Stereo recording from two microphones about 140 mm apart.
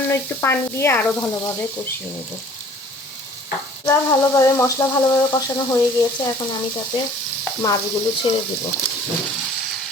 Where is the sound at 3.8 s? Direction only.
20° left (ahead or behind).